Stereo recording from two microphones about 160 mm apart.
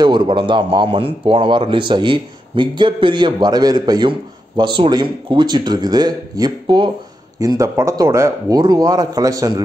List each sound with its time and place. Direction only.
0.0 s a man's voice: 30° right (ahead or behind)